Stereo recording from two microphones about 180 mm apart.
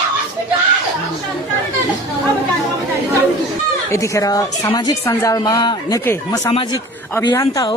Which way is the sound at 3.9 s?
15° left (ahead or behind).